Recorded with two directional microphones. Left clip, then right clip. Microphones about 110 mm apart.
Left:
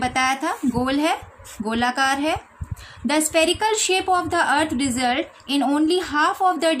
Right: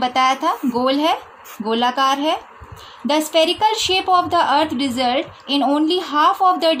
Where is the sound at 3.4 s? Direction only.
10° right (ahead or behind).